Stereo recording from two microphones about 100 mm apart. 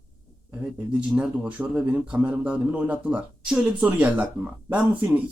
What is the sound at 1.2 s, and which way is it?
Speech, 10° right (ahead or behind).